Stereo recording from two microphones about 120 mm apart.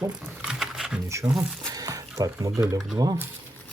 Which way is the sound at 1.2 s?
10° right (ahead or behind).